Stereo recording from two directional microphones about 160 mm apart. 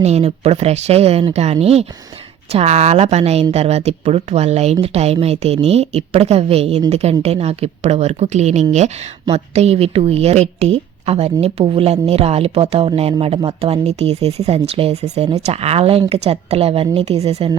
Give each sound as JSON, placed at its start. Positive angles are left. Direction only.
{"t": 0.0, "sound": "a woman's voice", "side_deg": -40}